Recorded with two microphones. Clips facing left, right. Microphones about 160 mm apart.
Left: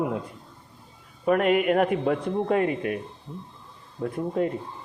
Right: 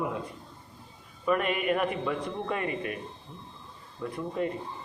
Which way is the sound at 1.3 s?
65° left (ahead or behind).